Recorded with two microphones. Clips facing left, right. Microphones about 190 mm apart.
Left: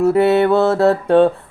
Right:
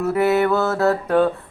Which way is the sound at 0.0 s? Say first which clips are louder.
Left 5 dB; 30° left (ahead or behind).